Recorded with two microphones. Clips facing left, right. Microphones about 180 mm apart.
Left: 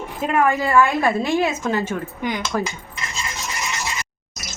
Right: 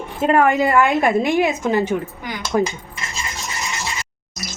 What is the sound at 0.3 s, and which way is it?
A woman's voice, 20° right (ahead or behind).